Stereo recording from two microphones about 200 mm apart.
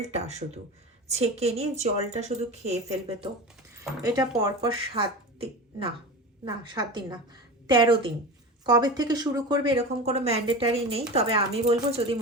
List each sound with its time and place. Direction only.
0.0 s a woman's voice: 35° right (ahead or behind)
4.0 s a woman's voice: 20° right (ahead or behind)